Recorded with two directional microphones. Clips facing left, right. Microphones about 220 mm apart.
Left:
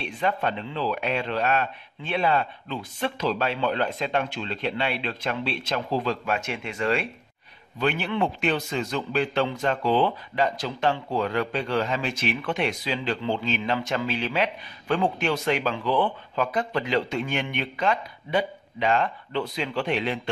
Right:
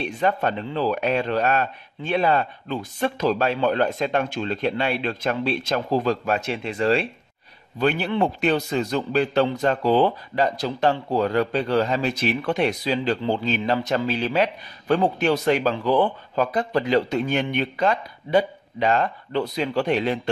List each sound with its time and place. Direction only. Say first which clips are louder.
0.0 s a man's voice: right 4 dB; 45° right (ahead or behind)